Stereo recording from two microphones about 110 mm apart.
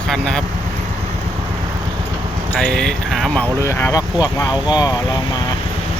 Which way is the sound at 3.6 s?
25° left (ahead or behind).